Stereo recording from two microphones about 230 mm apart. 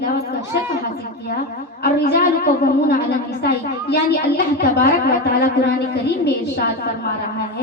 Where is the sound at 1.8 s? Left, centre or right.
Left.